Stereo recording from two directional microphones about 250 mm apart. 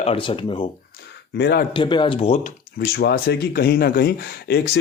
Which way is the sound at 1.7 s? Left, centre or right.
Centre.